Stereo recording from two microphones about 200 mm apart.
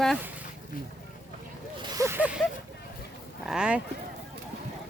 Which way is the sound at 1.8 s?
20° right (ahead or behind).